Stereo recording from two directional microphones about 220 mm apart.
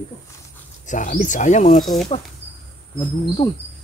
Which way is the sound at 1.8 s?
Centre (ahead or behind).